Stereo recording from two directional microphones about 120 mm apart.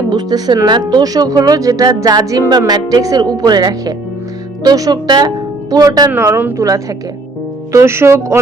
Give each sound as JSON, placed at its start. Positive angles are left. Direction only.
{"t": 0.1, "sound": "speech", "side_deg": -35}
{"t": 6.1, "sound": "a woman's voice", "side_deg": -20}